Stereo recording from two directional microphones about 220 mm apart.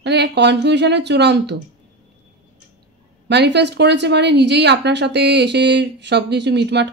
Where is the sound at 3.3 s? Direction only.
50° right (ahead or behind).